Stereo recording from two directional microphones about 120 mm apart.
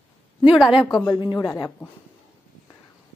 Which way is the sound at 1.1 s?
35° left (ahead or behind).